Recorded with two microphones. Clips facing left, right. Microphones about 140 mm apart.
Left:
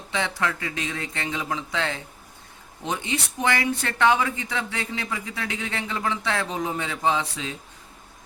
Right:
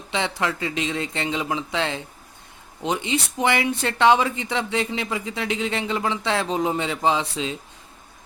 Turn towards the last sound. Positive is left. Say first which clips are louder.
# right 2 dB
turn(degrees=-20)  # may be behind; listen again after turning